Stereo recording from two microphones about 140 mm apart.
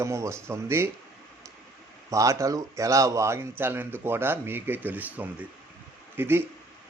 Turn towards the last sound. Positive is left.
turn(degrees=-15)  # may be behind; listen again after turning